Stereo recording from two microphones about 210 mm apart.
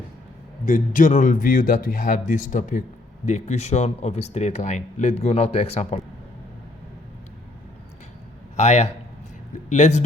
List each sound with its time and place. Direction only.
0.6 s speech: 40° left (ahead or behind)
8.5 s speech: 35° left (ahead or behind)